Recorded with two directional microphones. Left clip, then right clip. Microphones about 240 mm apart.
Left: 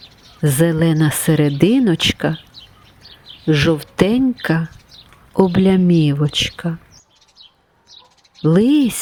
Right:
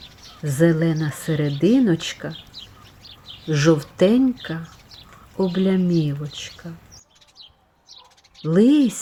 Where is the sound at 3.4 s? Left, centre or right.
Left.